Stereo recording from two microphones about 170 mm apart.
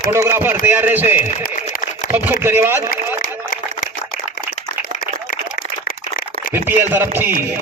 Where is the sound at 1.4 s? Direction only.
55° left (ahead or behind).